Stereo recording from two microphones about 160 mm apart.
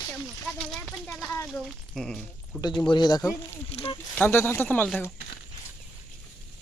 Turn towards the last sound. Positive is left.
turn(degrees=10)  # may be behind; listen again after turning